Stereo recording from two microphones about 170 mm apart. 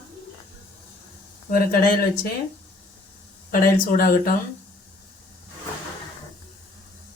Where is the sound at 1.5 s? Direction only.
60° left (ahead or behind).